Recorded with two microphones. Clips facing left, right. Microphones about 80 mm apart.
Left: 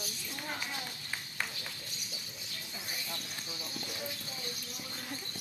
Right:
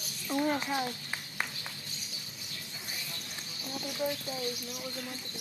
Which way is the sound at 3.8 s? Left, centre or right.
Centre.